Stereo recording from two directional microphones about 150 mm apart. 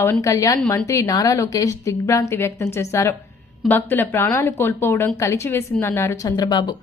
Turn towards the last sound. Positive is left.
turn(degrees=30)  # may be behind; listen again after turning